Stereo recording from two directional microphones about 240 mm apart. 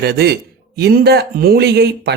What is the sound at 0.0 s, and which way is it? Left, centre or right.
A man's voice, right.